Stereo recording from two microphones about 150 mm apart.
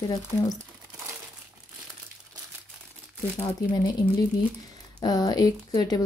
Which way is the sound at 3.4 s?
25° left (ahead or behind).